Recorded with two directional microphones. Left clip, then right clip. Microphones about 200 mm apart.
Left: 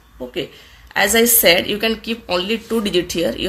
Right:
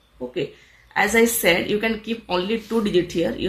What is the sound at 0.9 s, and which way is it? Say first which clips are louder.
Speech: left 3 dB; 35° left (ahead or behind).